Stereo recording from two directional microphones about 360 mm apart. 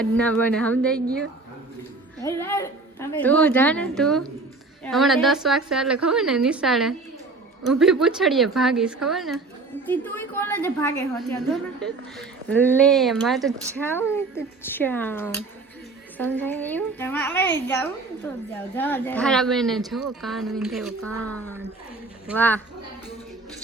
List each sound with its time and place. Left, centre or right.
0.0 s speech: centre
2.2 s speech: centre